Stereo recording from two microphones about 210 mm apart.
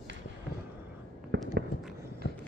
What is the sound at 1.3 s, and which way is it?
Fireworks, 55° right (ahead or behind).